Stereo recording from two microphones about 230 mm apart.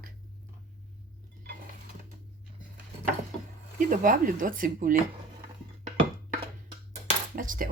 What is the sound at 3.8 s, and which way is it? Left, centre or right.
Speech, right.